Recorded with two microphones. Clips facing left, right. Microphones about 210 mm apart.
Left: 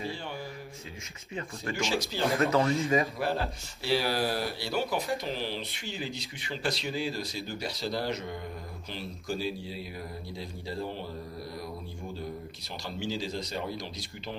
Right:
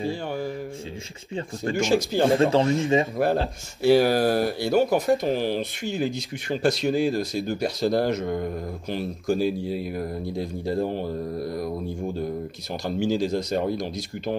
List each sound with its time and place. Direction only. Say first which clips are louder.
0.0 s music: right 9 dB; 45° right (ahead or behind)
1.8 s speech: right 10 dB; 45° right (ahead or behind)
2.2 s speech: right 4 dB; 30° right (ahead or behind)
3.8 s speech: right 10 dB; 50° right (ahead or behind)
12.8 s speech: right 10 dB; 50° right (ahead or behind)